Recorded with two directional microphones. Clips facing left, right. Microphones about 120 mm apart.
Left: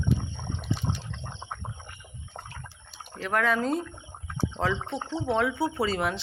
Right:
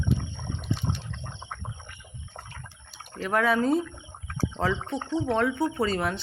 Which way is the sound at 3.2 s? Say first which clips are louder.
Right 2 dB; 5° right (ahead or behind).